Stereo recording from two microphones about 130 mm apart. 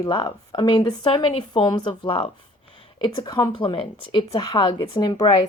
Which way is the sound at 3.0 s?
30° left (ahead or behind).